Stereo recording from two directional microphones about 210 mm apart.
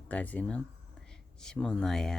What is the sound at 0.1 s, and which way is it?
Speech, 5° left (ahead or behind).